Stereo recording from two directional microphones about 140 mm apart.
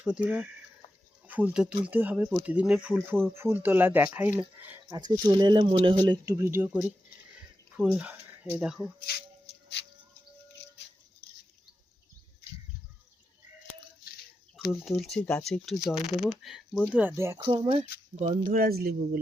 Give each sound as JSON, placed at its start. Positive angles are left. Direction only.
{"t": 0.0, "sound": "speech", "side_deg": -10}
{"t": 4.9, "sound": "speech", "side_deg": -25}
{"t": 6.3, "sound": "speech", "side_deg": -20}
{"t": 14.7, "sound": "speech", "side_deg": 5}
{"t": 17.3, "sound": "speech", "side_deg": -35}
{"t": 18.4, "sound": "speech", "side_deg": -90}